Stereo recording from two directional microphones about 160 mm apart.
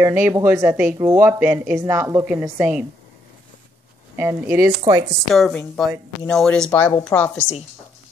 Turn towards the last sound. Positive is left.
turn(degrees=10)  # may be behind; listen again after turning